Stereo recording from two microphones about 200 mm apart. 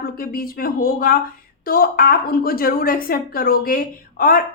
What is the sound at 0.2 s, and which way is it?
A woman's voice, 45° left (ahead or behind).